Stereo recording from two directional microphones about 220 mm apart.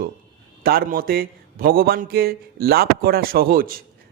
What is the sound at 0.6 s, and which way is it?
A man's voice, 45° right (ahead or behind).